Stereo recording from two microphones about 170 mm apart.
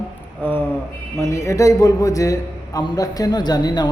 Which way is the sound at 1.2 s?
15° left (ahead or behind).